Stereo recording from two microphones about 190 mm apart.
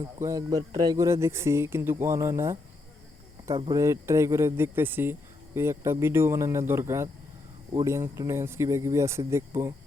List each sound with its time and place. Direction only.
0.0 s speech: 15° right (ahead or behind)